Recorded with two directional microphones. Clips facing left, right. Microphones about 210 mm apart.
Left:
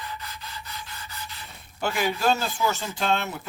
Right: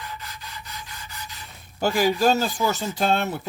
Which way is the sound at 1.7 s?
35° right (ahead or behind).